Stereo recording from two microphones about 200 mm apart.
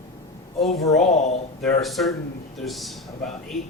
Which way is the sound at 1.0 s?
35° left (ahead or behind).